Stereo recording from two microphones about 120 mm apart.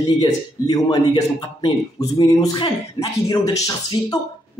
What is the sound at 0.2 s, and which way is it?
Speech, 35° left (ahead or behind).